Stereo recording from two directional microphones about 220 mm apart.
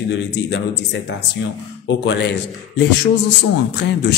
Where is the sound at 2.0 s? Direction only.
50° left (ahead or behind).